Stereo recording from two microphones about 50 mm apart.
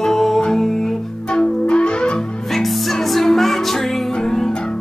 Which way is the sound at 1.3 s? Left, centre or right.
Centre.